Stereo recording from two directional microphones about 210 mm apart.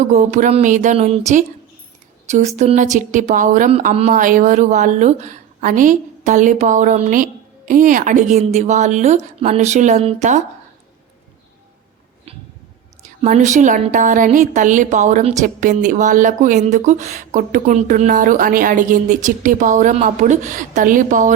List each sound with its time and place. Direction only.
0.0 s a woman's voice: 35° right (ahead or behind)
2.6 s a woman's voice: 35° right (ahead or behind)
13.2 s a woman's voice: 35° right (ahead or behind)